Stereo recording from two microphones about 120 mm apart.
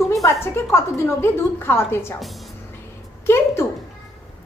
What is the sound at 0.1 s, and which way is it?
A woman's voice, 25° left (ahead or behind).